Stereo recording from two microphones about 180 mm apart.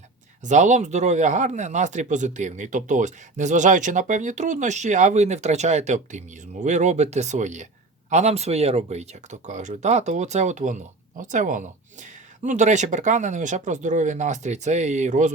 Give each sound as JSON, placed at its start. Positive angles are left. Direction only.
{"t": 0.4, "sound": "speech", "side_deg": -40}